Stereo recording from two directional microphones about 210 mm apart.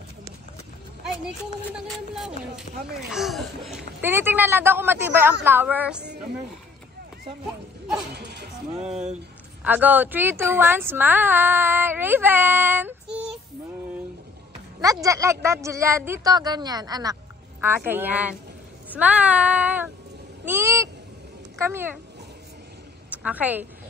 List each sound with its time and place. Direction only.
1.9 s a woman's voice: centre (ahead or behind)
7.4 s speech: 5° right (ahead or behind)
8.1 s speech: 50° right (ahead or behind)
9.6 s a woman's voice: 10° right (ahead or behind)
14.8 s a woman's voice: 15° right (ahead or behind)
23.1 s a woman's voice: 5° right (ahead or behind)